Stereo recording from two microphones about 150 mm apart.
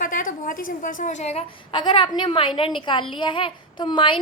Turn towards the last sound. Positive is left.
turn(degrees=35)  # may be behind; listen again after turning